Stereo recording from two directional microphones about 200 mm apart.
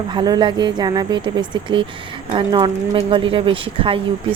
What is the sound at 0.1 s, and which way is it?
Speech, 20° right (ahead or behind).